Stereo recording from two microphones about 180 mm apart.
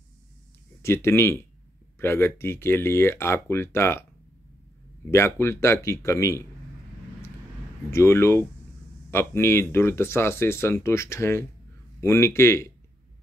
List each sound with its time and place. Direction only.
0.8 s speech: 15° left (ahead or behind)
5.1 s speech: 15° left (ahead or behind)
7.9 s speech: 15° left (ahead or behind)